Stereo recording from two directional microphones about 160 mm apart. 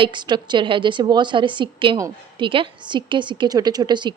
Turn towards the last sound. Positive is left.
turn(degrees=-30)  # may be behind; listen again after turning